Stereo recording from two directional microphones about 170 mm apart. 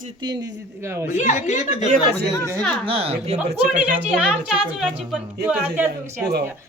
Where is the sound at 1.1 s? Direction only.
45° left (ahead or behind).